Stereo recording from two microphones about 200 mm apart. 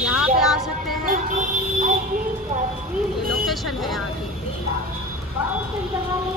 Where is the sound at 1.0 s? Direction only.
40° right (ahead or behind).